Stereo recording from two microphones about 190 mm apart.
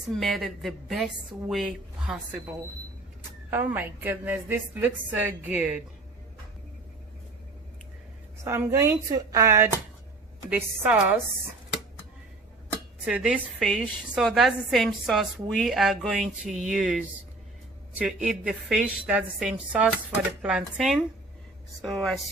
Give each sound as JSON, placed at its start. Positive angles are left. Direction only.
{"t": 0.1, "sound": "a woman's voice", "side_deg": 0}
{"t": 3.5, "sound": "a woman's voice", "side_deg": -10}
{"t": 8.4, "sound": "a woman's voice", "side_deg": -15}
{"t": 13.1, "sound": "a woman's voice", "side_deg": -5}